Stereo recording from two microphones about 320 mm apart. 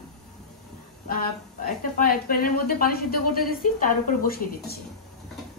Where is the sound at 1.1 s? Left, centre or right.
Left.